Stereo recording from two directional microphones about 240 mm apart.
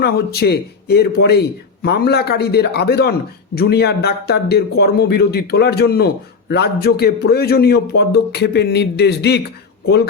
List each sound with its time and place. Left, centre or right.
0.0 s speech: left